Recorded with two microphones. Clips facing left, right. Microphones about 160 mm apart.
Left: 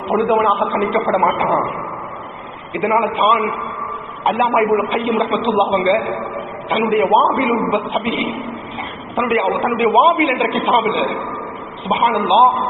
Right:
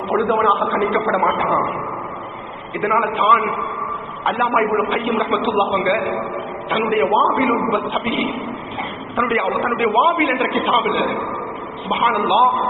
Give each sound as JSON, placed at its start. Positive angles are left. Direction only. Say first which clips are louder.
{"t": 0.1, "sound": "a man's voice", "louder": "left 2 dB", "side_deg": 20}
{"t": 2.7, "sound": "a man's voice", "louder": "left 2 dB", "side_deg": 20}
{"t": 6.7, "sound": "a man's voice", "louder": "left 3 dB", "side_deg": 20}
{"t": 9.1, "sound": "a man's voice", "louder": "left 3 dB", "side_deg": 20}